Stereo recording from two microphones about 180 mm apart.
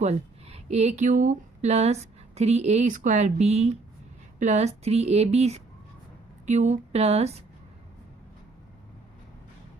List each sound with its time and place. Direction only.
0.0 s speech: 35° right (ahead or behind)